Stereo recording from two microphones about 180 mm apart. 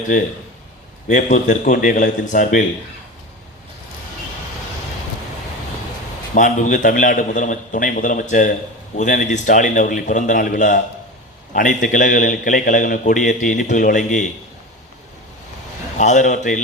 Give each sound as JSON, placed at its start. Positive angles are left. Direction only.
{"t": 1.0, "sound": "a man's voice", "side_deg": 45}
{"t": 6.3, "sound": "a man's voice", "side_deg": 45}
{"t": 16.0, "sound": "a man's voice", "side_deg": 45}